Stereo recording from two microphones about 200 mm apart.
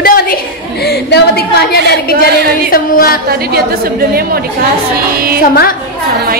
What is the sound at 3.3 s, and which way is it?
A woman's voice, 50° right (ahead or behind).